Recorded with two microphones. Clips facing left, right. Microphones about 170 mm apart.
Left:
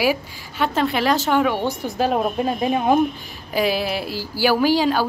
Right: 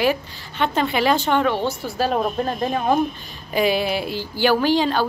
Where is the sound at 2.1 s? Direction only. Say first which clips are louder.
Left 1 dB; 5° left (ahead or behind).